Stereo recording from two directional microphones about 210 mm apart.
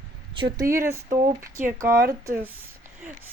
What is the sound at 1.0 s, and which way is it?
Speech, 35° right (ahead or behind).